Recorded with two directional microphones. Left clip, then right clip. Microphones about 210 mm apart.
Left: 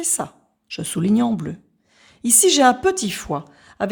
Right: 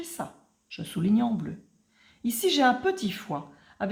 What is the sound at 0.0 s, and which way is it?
Speech, 50° left (ahead or behind).